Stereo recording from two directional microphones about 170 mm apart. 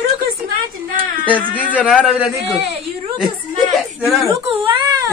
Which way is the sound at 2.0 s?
5° right (ahead or behind).